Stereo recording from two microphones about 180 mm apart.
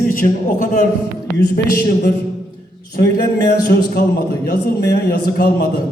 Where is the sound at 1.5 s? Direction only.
55° left (ahead or behind).